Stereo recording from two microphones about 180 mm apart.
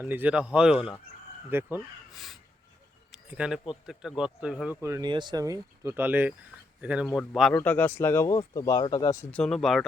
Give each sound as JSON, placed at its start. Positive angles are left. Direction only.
{"t": 0.0, "sound": "speech", "side_deg": -10}
{"t": 2.1, "sound": "speech", "side_deg": 0}
{"t": 3.1, "sound": "a sound", "side_deg": -5}
{"t": 4.2, "sound": "speech", "side_deg": -5}
{"t": 4.8, "sound": "speech", "side_deg": -20}
{"t": 9.3, "sound": "speech", "side_deg": 5}